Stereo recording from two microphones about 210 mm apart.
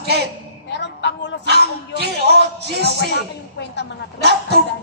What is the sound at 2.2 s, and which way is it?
Music, 50° right (ahead or behind).